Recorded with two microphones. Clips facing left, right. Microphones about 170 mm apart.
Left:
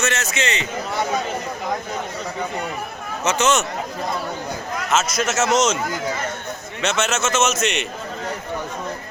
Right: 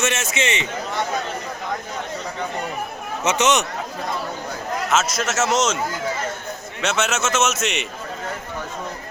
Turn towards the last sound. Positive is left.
turn(degrees=-5)  # may be behind; listen again after turning